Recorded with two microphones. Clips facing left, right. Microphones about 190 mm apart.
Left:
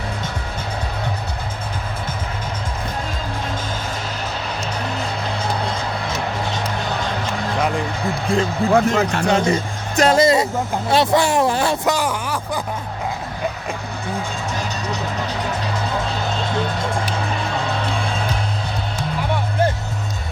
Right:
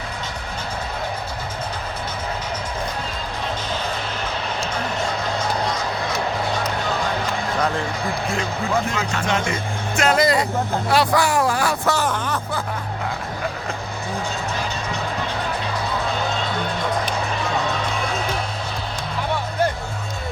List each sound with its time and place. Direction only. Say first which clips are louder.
8.7 s speech: left 8 dB; 45° left (ahead or behind); by 11.9 s 25° left (ahead or behind)
11.9 s speech: left 1 dB; 10° left (ahead or behind)